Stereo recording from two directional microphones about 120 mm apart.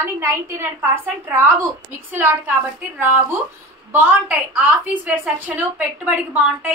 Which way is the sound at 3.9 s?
15° right (ahead or behind).